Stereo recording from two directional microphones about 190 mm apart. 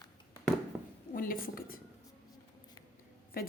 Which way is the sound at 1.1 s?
50° left (ahead or behind).